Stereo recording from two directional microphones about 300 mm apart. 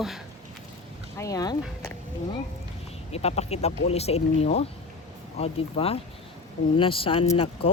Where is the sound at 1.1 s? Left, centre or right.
Centre.